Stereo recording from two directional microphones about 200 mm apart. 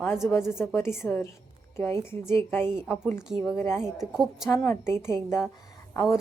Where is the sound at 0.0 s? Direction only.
10° left (ahead or behind).